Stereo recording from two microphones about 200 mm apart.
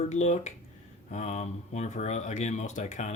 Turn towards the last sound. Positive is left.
turn(degrees=35)  # may be behind; listen again after turning